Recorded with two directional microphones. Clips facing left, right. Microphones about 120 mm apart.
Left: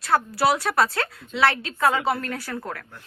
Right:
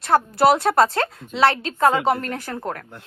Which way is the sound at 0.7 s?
25° right (ahead or behind).